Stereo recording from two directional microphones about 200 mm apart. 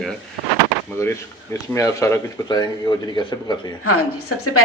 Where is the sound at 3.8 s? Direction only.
90° left.